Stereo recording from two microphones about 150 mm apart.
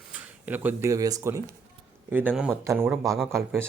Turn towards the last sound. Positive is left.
turn(degrees=-15)  # may be behind; listen again after turning